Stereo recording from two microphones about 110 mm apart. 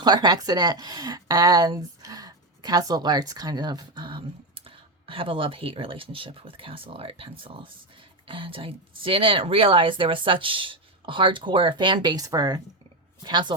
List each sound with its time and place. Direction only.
0.0 s a woman's voice: 40° right (ahead or behind)